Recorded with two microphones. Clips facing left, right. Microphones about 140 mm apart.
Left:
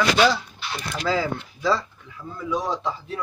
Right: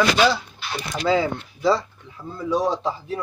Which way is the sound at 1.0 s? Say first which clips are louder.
Right 4 dB; 25° right (ahead or behind).